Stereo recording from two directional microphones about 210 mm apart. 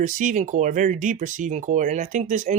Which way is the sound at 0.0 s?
35° right (ahead or behind).